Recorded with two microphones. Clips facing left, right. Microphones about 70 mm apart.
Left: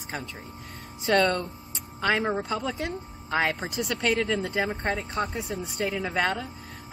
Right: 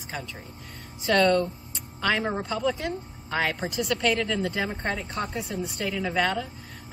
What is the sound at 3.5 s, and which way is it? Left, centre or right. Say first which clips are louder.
Speech: right 2 dB; centre.